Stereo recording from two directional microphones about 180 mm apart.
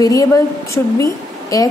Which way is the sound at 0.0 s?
20° left (ahead or behind).